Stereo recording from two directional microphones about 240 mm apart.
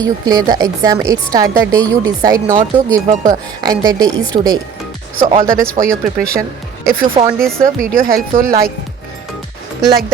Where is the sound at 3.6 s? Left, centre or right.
Centre.